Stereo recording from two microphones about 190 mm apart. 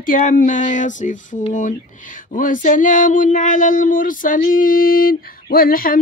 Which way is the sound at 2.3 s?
45° left (ahead or behind).